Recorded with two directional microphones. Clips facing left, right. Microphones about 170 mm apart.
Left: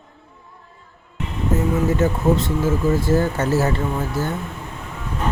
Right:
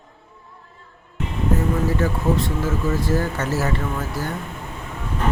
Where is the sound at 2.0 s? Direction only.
20° left (ahead or behind).